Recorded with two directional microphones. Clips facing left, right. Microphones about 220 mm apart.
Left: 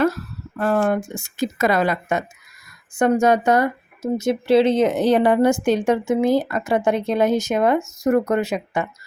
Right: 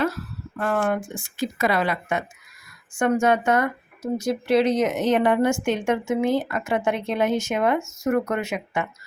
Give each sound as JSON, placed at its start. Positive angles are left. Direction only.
{"t": 0.6, "sound": "speech", "side_deg": 35}
{"t": 4.0, "sound": "speech", "side_deg": 25}